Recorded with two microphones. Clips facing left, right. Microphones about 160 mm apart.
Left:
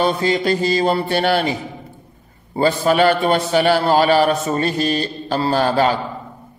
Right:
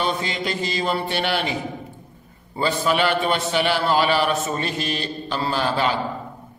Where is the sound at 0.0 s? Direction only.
40° left (ahead or behind).